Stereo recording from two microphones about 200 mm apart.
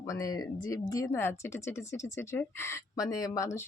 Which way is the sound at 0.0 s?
15° left (ahead or behind).